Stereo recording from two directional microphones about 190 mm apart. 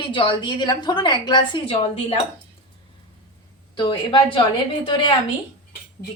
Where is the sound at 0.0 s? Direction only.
25° left (ahead or behind).